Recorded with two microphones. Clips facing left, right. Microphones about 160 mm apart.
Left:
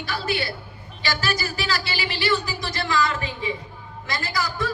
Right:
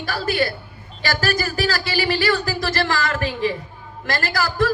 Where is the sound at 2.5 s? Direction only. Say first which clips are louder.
Right 4 dB; 90° right; by 3.5 s 70° right (ahead or behind).